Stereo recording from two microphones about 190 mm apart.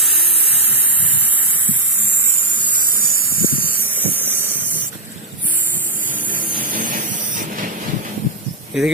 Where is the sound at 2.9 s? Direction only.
50° right (ahead or behind).